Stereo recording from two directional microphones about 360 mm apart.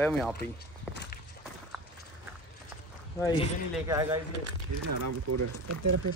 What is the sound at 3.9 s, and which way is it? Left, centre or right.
Speech, centre.